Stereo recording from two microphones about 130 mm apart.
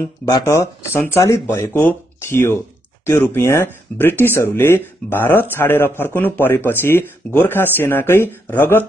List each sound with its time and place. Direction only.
0.2 s speech: 25° left (ahead or behind)